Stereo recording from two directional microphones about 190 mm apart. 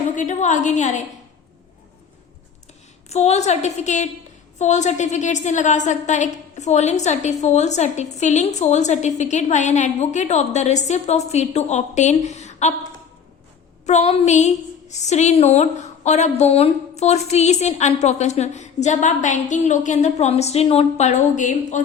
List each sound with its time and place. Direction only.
0.2 s a woman's voice: 40° left (ahead or behind)
3.1 s a woman's voice: 35° left (ahead or behind)
13.8 s a woman's voice: 35° left (ahead or behind)